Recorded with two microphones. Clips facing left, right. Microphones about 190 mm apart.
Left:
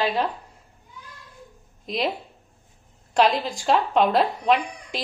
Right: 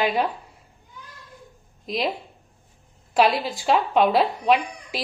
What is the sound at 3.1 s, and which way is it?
A woman's voice, 5° right (ahead or behind).